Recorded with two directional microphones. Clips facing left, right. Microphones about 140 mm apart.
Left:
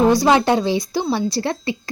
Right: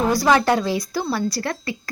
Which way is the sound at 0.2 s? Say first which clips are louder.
Left 2 dB; 20° left (ahead or behind).